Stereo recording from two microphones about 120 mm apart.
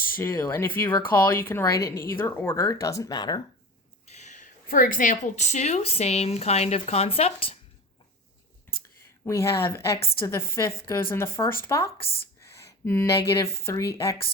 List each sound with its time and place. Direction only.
0.2 s a woman's voice: 20° left (ahead or behind); by 3.4 s 35° left (ahead or behind)
4.0 s a sound: 70° left (ahead or behind)
4.9 s speech: 90° left; by 7.6 s 55° left (ahead or behind)
9.0 s a woman's voice: 25° left (ahead or behind)